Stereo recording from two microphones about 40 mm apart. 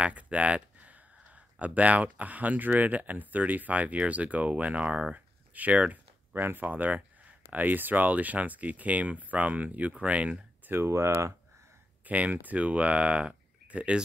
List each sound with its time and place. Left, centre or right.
0.0 s speech: right
5.1 s a sound: right
6.3 s speech: right
10.7 s speech: right
12.0 s speech: right